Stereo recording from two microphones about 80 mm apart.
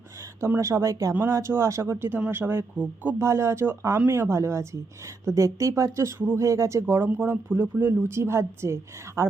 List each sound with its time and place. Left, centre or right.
0.3 s speech: right
3.2 s speech: right